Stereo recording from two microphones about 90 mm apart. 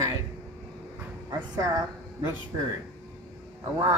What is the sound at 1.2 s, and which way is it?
A woman's voice, 45° right (ahead or behind).